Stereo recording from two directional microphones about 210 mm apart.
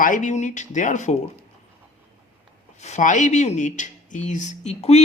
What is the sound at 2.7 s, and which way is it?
Speech, 35° left (ahead or behind).